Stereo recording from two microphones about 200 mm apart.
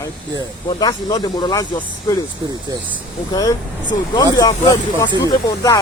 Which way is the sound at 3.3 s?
15° left (ahead or behind).